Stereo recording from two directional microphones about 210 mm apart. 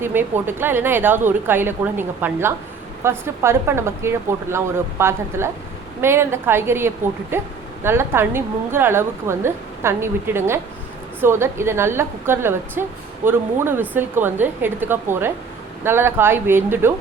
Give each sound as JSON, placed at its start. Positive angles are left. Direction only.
{"t": 0.0, "sound": "a woman's voice", "side_deg": -10}